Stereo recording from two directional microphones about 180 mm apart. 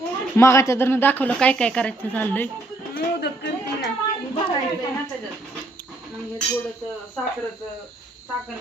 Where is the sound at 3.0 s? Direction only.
65° left (ahead or behind).